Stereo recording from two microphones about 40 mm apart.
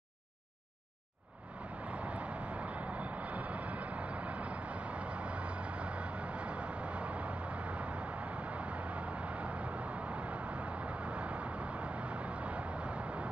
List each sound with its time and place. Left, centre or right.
1.9 s vehicle: right